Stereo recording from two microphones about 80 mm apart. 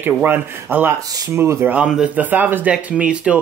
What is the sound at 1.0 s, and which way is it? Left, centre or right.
Speech, right.